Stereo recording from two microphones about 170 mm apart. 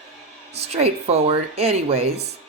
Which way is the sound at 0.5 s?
40° right (ahead or behind).